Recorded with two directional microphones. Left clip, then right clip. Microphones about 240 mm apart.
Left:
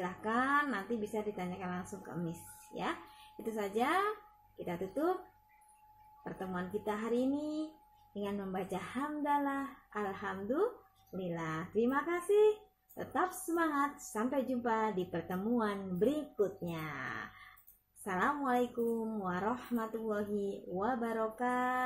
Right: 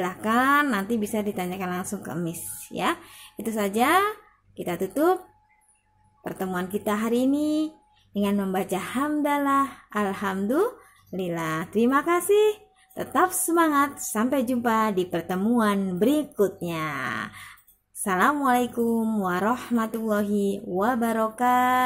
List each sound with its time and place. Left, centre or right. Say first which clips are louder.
0.0 s speech: right 11 dB; right
6.2 s speech: right 11 dB; right